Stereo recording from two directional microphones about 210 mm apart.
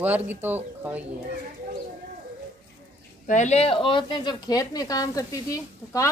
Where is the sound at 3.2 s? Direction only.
35° left (ahead or behind).